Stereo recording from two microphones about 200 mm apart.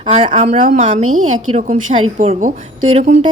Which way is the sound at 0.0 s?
30° right (ahead or behind).